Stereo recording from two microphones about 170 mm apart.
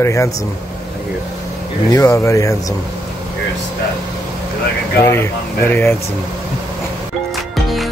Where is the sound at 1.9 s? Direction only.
20° left (ahead or behind).